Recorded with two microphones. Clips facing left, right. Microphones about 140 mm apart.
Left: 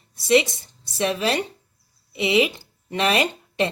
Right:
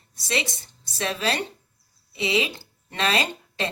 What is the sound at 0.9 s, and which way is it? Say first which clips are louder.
A woman's voice: left 4 dB; 20° left (ahead or behind).